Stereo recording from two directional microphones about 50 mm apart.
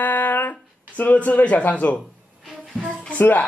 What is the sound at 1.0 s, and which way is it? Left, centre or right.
Speech, left.